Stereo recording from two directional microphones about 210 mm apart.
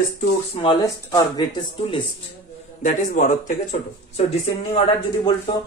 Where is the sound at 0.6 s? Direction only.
20° left (ahead or behind).